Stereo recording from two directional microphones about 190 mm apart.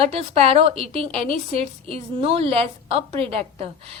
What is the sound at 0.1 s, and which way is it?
A woman's voice, 30° right (ahead or behind).